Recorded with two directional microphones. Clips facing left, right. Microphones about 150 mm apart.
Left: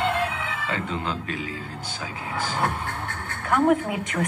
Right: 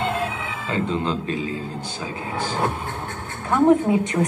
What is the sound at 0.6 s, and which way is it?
Speech, 30° right (ahead or behind).